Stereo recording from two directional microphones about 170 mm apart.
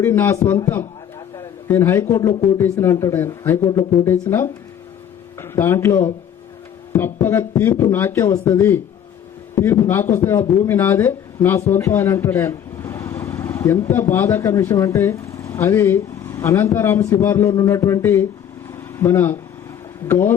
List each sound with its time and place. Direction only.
0.0 s a man's voice: 15° left (ahead or behind)
11.7 s vehicle: 15° left (ahead or behind)
13.9 s speech: 15° left (ahead or behind)
18.7 s vehicle: 15° left (ahead or behind)
20.1 s speech: 15° left (ahead or behind)